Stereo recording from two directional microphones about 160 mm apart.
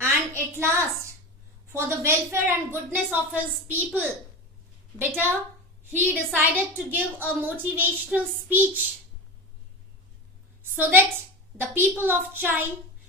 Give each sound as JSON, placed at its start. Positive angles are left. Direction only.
{"t": 0.0, "sound": "a sound", "side_deg": -15}
{"t": 1.7, "sound": "a woman's voice", "side_deg": -15}
{"t": 10.6, "sound": "a woman's voice", "side_deg": -10}